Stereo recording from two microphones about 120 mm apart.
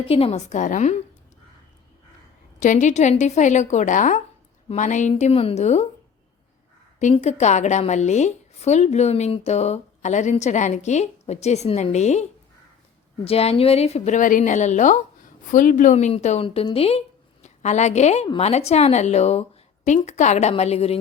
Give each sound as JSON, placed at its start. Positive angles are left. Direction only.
{"t": 0.0, "sound": "a woman's voice", "side_deg": 50}
{"t": 2.6, "sound": "a woman's voice", "side_deg": 90}
{"t": 7.2, "sound": "a woman's voice", "side_deg": 70}
{"t": 13.2, "sound": "a woman's voice", "side_deg": 55}
{"t": 16.4, "sound": "a woman's voice", "side_deg": 50}
{"t": 17.4, "sound": "a woman's voice", "side_deg": 70}